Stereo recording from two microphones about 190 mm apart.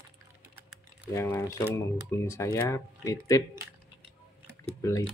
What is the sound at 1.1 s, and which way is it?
Speech, 15° left (ahead or behind).